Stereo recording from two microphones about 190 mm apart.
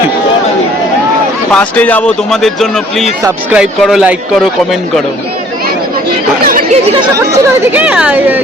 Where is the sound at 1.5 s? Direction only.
5° left (ahead or behind).